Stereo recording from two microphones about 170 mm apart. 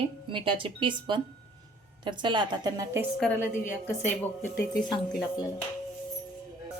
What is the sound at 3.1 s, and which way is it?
Speech, 10° left (ahead or behind).